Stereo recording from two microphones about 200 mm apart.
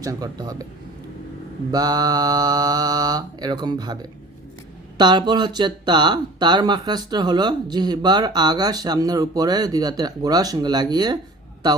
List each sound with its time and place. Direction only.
0.0 s speech: 20° right (ahead or behind)
1.7 s speech: 20° right (ahead or behind)
4.9 s speech: 20° right (ahead or behind)